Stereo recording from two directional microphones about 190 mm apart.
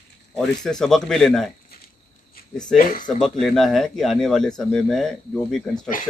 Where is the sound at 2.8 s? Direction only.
45° left (ahead or behind).